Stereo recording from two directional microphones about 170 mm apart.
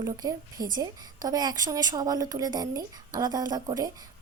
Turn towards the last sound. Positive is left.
turn(degrees=-20)  # may be behind; listen again after turning